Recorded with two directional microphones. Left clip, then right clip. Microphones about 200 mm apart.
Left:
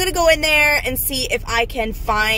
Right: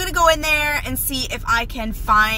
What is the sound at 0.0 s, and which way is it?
Speech, 35° right (ahead or behind).